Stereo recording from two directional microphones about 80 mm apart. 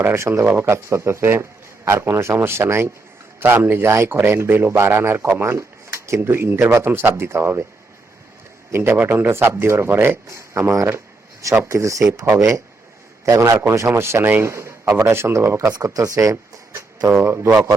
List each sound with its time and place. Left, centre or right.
0.0 s a man's voice: right
8.7 s a man's voice: right
13.2 s a man's voice: right
14.5 s a sound: right
15.0 s a man's voice: right
15.7 s speech: right
17.1 s a man's voice: right